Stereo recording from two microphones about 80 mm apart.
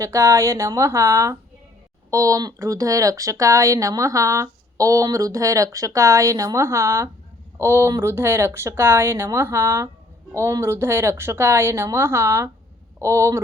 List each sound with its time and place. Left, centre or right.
0.0 s speech: right